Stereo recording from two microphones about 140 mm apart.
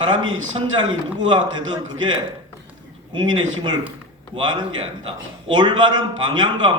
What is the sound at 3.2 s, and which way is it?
A man's voice, 35° right (ahead or behind).